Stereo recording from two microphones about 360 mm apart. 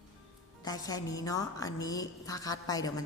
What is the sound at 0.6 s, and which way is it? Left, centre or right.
A woman's voice, centre.